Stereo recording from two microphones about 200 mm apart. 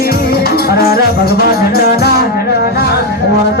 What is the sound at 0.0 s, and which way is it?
Music, 50° left (ahead or behind).